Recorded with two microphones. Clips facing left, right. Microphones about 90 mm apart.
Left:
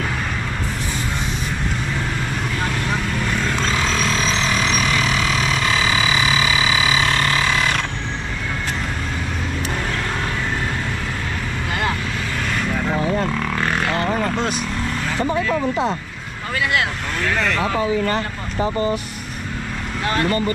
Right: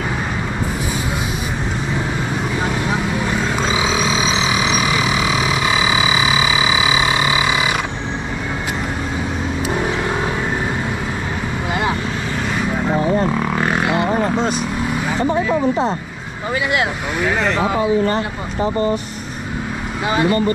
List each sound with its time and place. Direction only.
2.6 s vehicle: 10° right (ahead or behind)
12.7 s vehicle: 20° right (ahead or behind)
16.7 s vehicle: 10° right (ahead or behind)
20.1 s speech: 10° right (ahead or behind)